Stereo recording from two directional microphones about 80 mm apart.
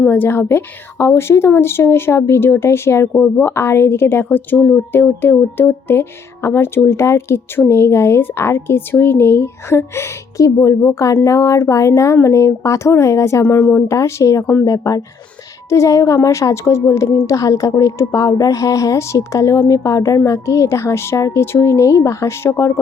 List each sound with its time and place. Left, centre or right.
0.1 s a woman's voice: left
13.4 s a woman's voice: left